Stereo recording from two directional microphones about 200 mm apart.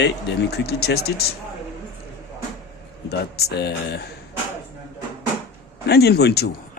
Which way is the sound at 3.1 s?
55° left (ahead or behind).